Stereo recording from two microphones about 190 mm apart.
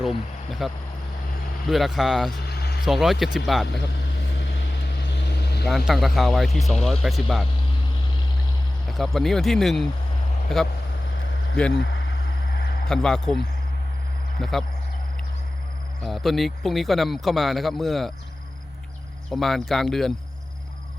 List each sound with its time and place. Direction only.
0.6 s speech: centre (ahead or behind)
2.5 s vehicle: 55° left (ahead or behind)
2.8 s speech: centre (ahead or behind)
4.9 s vehicle: 65° left (ahead or behind)
5.6 s speech: centre (ahead or behind)
8.9 s speech: centre (ahead or behind)
11.7 s speech: 65° left (ahead or behind)
12.9 s speech: 5° left (ahead or behind)
16.0 s speech: centre (ahead or behind)
19.3 s speech: centre (ahead or behind)